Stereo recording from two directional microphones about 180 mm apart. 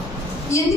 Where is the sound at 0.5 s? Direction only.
15° left (ahead or behind).